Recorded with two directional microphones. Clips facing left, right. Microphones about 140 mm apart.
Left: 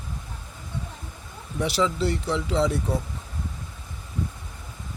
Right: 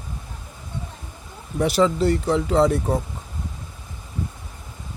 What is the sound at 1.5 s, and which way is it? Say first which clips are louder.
Speech: right 5 dB; 50° right (ahead or behind).